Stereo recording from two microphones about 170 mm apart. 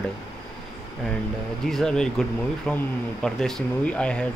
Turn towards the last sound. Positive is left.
turn(degrees=5)  # may be behind; listen again after turning